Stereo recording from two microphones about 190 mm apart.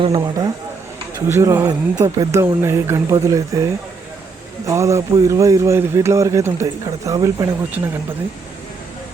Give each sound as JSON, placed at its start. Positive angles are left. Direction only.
{"t": 0.0, "sound": "a man's voice", "side_deg": -20}
{"t": 4.6, "sound": "a man's voice", "side_deg": -15}